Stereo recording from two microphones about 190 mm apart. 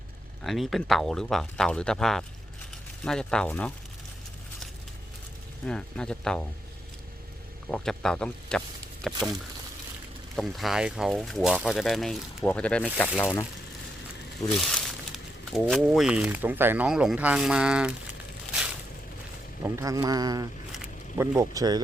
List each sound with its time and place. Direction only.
0.4 s speech: centre (ahead or behind)
5.6 s speech: 5° left (ahead or behind)
7.7 s speech: 5° left (ahead or behind)
10.3 s speech: centre (ahead or behind)
14.6 s speech: centre (ahead or behind)
19.6 s speech: 15° right (ahead or behind)
20.7 s a sound: 5° right (ahead or behind)
21.3 s speech: 20° right (ahead or behind)